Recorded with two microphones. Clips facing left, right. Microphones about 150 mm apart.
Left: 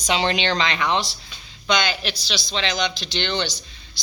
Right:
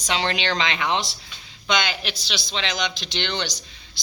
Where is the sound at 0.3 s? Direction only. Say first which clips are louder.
Left 2 dB; 15° right (ahead or behind).